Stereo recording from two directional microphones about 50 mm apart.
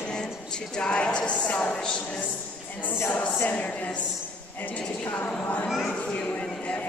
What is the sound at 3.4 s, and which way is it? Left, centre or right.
A woman's voice, left.